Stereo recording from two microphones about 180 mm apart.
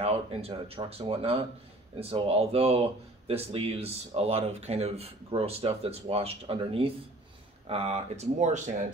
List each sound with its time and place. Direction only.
0.0 s speech: 35° right (ahead or behind)